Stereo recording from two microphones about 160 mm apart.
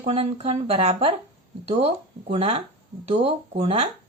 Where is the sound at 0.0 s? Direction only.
40° right (ahead or behind).